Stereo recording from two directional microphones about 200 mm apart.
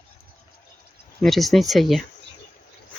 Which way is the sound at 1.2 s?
Centre (ahead or behind).